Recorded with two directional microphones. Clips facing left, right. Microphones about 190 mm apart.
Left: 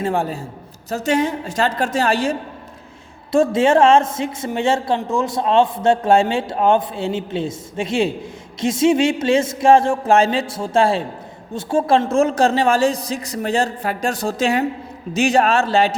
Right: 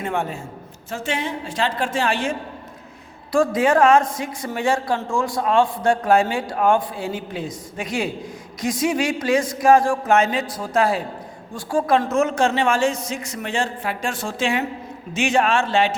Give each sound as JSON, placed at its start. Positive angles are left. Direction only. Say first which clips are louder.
{"t": 0.0, "sound": "a man's voice", "louder": "left 4 dB", "side_deg": 35}
{"t": 3.3, "sound": "a man's voice", "louder": "left 3 dB", "side_deg": 25}